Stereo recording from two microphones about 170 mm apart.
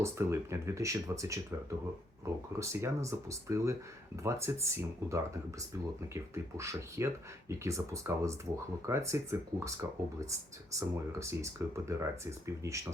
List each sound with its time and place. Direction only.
0.0 s speech: 15° right (ahead or behind)